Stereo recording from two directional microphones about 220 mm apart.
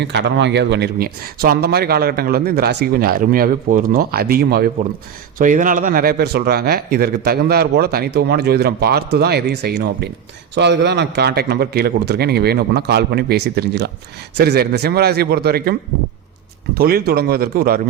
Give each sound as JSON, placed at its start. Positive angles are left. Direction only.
{"t": 0.0, "sound": "a man's voice", "side_deg": -50}
{"t": 16.7, "sound": "a man's voice", "side_deg": -45}